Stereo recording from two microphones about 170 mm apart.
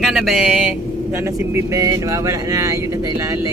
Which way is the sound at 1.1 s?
15° right (ahead or behind).